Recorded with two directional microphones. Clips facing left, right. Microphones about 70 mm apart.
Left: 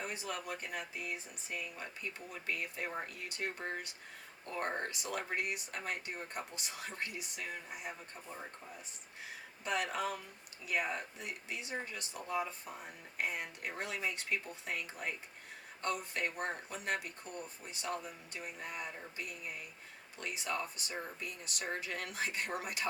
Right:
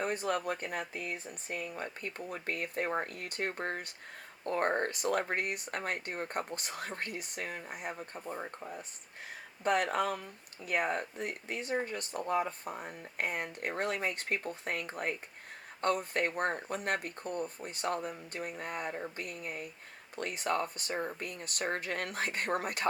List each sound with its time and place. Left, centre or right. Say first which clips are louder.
0.0 s speech: right 9 dB; right